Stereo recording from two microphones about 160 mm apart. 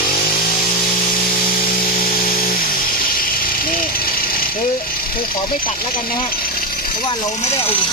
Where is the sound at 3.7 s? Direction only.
65° left (ahead or behind).